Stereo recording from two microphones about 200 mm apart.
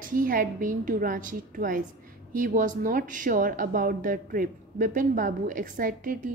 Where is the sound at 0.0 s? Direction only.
40° right (ahead or behind).